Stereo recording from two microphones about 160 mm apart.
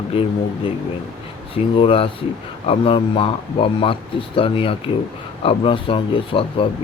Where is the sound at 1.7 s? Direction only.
35° left (ahead or behind).